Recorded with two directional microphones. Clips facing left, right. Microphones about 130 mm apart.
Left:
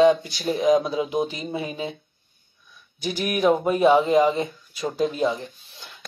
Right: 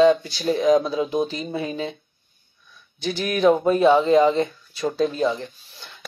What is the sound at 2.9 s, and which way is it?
Speech, 25° right (ahead or behind).